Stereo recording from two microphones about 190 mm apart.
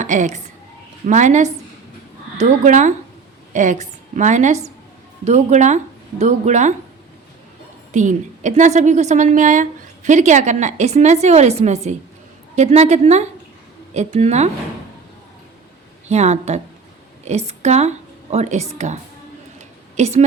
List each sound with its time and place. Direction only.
0.0 s a woman's voice: 40° right (ahead or behind)
7.9 s a woman's voice: 40° right (ahead or behind)
16.0 s a woman's voice: 35° right (ahead or behind)
19.5 s a sound: 35° right (ahead or behind)